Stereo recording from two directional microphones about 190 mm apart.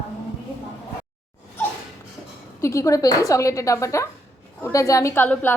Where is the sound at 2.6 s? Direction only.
15° left (ahead or behind).